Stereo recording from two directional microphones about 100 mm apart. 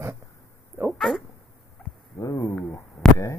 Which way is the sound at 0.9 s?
Centre (ahead or behind).